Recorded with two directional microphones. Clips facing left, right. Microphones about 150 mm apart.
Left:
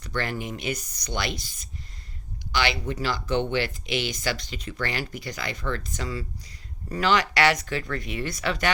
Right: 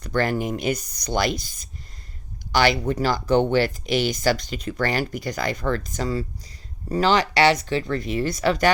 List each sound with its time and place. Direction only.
0.0 s speech: 45° right (ahead or behind)